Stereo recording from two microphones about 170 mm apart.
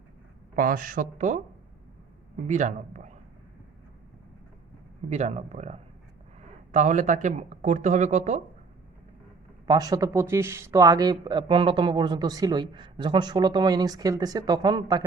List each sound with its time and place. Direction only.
0.5 s speech: 55° right (ahead or behind)
2.5 s speech: 45° right (ahead or behind)
5.0 s speech: 40° right (ahead or behind)
9.6 s speech: 20° right (ahead or behind)